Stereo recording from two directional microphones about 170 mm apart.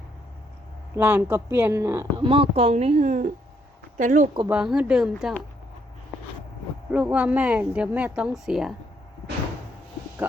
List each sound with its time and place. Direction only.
0.9 s speech: 10° right (ahead or behind)
2.2 s speech: 30° right (ahead or behind); by 4.3 s 50° right (ahead or behind)
4.4 s speech: 5° right (ahead or behind)
6.9 s speech: 5° right (ahead or behind)